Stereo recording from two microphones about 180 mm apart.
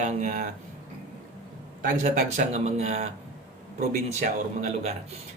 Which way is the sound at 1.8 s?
50° right (ahead or behind).